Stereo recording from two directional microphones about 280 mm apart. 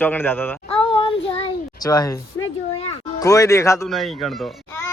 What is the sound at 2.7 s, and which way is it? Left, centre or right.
Music, centre.